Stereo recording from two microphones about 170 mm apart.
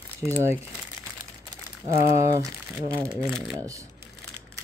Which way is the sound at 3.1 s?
5° left (ahead or behind).